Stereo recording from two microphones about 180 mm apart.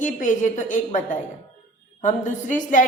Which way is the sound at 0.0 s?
45° left (ahead or behind).